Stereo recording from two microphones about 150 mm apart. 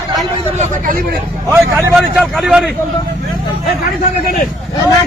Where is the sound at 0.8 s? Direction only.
65° right (ahead or behind).